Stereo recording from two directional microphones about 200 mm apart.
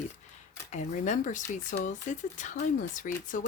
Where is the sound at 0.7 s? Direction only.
35° left (ahead or behind).